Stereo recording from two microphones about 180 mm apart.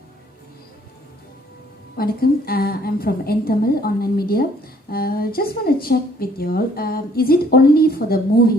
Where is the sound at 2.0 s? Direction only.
55° left (ahead or behind).